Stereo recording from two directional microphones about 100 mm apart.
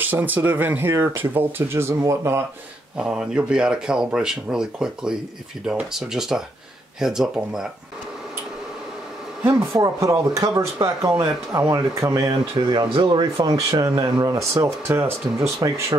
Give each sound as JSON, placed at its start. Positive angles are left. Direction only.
{"t": 0.0, "sound": "speech", "side_deg": -20}
{"t": 3.0, "sound": "speech", "side_deg": -10}
{"t": 9.4, "sound": "speech", "side_deg": -30}
{"t": 12.3, "sound": "speech", "side_deg": -45}
{"t": 13.5, "sound": "speech", "side_deg": -35}
{"t": 15.6, "sound": "speech", "side_deg": -40}